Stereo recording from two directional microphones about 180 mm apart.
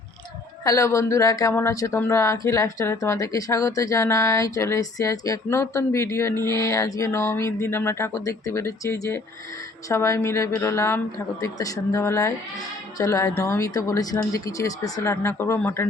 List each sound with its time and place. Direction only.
0.6 s speech: 15° left (ahead or behind)